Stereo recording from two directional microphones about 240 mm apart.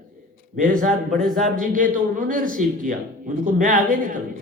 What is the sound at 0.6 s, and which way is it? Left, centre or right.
Speech, right.